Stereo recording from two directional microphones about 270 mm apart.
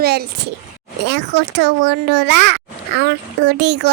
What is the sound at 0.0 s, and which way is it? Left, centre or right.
A child's voice, right.